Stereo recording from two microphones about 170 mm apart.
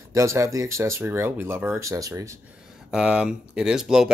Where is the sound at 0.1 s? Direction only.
15° right (ahead or behind).